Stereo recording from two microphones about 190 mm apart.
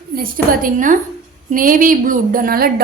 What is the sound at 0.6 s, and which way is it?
A woman's voice, 45° right (ahead or behind).